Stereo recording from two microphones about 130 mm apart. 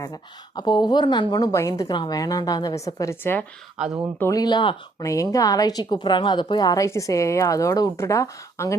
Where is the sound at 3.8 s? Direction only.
5° right (ahead or behind).